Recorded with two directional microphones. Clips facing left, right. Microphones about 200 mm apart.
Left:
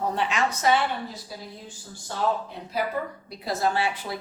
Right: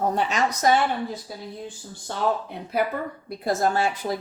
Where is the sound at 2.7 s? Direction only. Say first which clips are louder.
Right 3 dB; 55° right (ahead or behind).